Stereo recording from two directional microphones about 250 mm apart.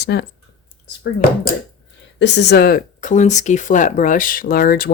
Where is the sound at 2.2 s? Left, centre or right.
Left.